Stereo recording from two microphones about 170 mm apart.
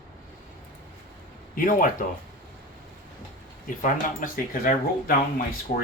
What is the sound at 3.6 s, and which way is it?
Speech, 55° left (ahead or behind).